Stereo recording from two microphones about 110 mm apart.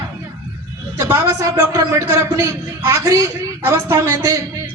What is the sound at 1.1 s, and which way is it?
A man's voice, 25° right (ahead or behind).